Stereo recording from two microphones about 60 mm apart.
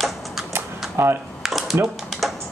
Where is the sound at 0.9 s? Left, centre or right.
Right.